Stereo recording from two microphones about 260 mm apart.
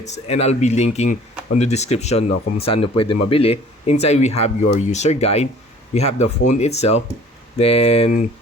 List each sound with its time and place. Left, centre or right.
0.0 s speech: left